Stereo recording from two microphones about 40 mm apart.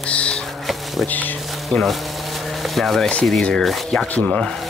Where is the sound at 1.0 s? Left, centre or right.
Left.